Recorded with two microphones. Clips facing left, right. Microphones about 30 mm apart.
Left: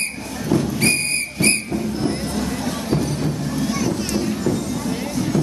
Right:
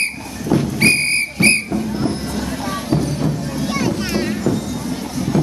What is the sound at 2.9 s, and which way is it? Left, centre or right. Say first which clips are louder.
Music: right 3 dB; centre.